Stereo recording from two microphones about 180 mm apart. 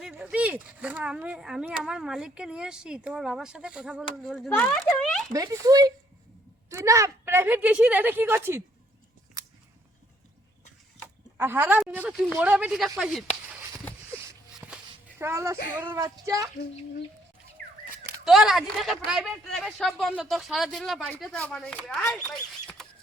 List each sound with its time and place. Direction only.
0.0 s speech: 5° right (ahead or behind)
4.4 s speech: 10° left (ahead or behind)
5.3 s a woman's voice: 20° right (ahead or behind)
11.3 s a woman's voice: 10° right (ahead or behind)
13.0 s a sound: centre (ahead or behind)
15.2 s a woman's voice: 15° right (ahead or behind)
18.3 s speech: centre (ahead or behind)